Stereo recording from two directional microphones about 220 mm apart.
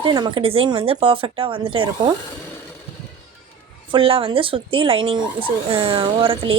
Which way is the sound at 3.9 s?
25° right (ahead or behind).